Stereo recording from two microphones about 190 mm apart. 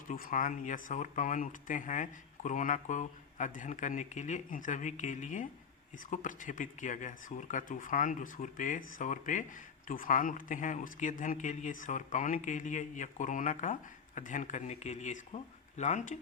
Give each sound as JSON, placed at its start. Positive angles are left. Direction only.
{"t": 0.1, "sound": "speech", "side_deg": 45}